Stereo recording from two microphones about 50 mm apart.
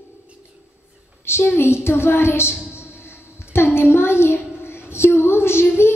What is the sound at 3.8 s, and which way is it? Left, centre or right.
Child singing, left.